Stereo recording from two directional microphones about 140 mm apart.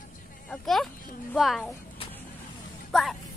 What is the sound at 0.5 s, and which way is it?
A woman's voice, centre (ahead or behind).